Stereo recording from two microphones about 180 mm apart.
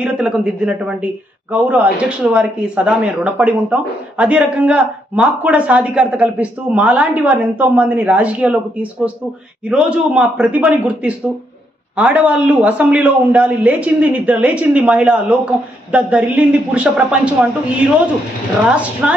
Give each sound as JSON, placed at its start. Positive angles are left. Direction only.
{"t": 0.0, "sound": "a man's voice", "side_deg": -5}
{"t": 9.7, "sound": "speech", "side_deg": -5}